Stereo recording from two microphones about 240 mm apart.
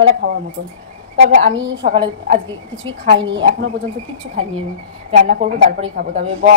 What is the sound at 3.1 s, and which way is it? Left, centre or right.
Speech, right.